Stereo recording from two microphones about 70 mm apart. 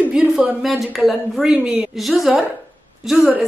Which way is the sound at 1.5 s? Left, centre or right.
Centre.